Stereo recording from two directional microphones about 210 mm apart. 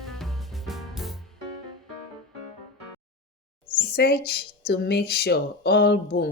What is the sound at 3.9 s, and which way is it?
Speech, 50° left (ahead or behind).